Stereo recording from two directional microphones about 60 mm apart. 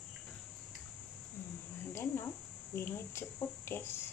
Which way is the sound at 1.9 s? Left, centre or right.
Left.